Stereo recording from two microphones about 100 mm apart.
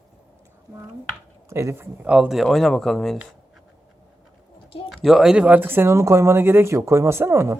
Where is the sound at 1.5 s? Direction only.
25° right (ahead or behind).